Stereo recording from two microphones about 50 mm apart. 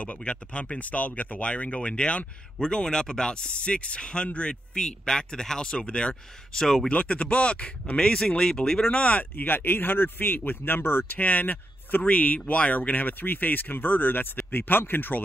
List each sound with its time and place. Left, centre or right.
0.0 s speech: left; by 6.9 s centre
6.9 s speech: left
8.9 s speech: left